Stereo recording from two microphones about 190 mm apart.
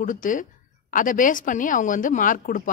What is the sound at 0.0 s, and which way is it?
A woman's voice, 45° left (ahead or behind).